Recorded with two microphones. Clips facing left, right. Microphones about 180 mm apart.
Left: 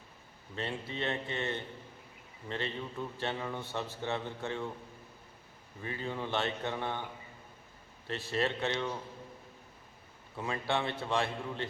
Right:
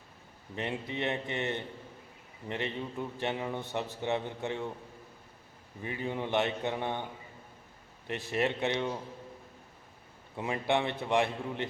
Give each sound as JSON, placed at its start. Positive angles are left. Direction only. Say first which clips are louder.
{"t": 0.5, "sound": "a man's voice", "louder": "right 3 dB", "side_deg": -15}
{"t": 5.8, "sound": "a man's voice", "louder": "right 3 dB", "side_deg": -15}
{"t": 8.0, "sound": "a man's voice", "louder": "right 2 dB", "side_deg": -15}
{"t": 10.3, "sound": "a man's voice", "louder": "right 4 dB", "side_deg": -20}